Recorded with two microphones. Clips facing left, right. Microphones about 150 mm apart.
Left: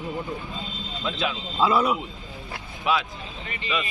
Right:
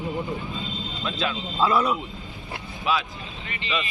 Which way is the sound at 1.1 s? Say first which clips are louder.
Even; 10° left (ahead or behind).